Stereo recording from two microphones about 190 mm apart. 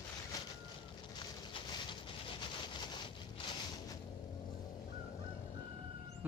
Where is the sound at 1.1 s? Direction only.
25° left (ahead or behind).